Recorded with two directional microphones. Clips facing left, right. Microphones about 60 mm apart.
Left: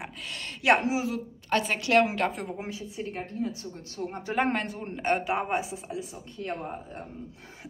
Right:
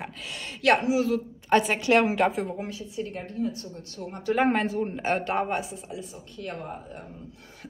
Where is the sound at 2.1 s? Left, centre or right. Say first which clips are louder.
Right 5 dB; centre.